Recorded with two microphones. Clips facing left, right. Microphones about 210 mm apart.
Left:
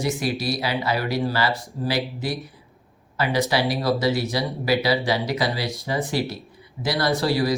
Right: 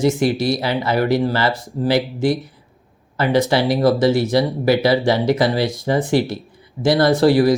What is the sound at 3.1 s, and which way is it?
Speech, 50° right (ahead or behind).